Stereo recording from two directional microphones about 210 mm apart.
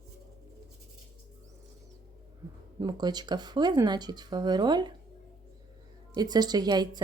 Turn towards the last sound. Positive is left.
turn(degrees=-20)  # may be behind; listen again after turning